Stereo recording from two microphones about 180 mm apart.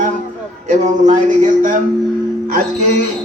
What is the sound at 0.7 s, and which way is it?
A man's voice, 40° right (ahead or behind).